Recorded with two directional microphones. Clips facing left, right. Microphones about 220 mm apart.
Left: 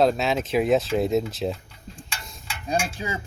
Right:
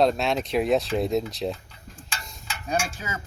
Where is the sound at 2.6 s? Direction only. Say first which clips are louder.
Left 2 dB; 30° left (ahead or behind).